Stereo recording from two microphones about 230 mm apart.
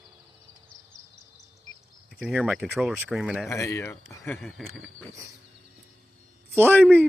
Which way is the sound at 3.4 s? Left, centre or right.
Centre.